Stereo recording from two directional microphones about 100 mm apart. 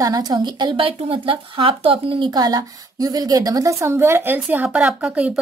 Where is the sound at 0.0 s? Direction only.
40° right (ahead or behind).